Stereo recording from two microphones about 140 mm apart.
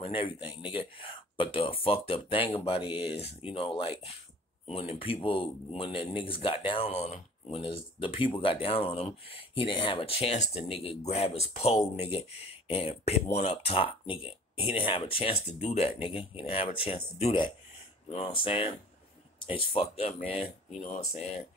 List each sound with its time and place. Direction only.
0.0 s speech: 40° left (ahead or behind)
15.4 s speech: 55° left (ahead or behind)
16.0 s speech: 40° left (ahead or behind)